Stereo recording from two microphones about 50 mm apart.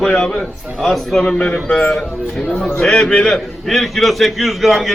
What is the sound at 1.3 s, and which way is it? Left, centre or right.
Speech, left.